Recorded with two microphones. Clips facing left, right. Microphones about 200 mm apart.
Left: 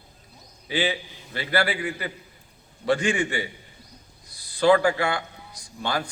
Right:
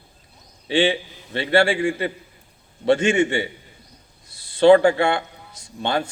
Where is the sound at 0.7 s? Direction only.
30° right (ahead or behind).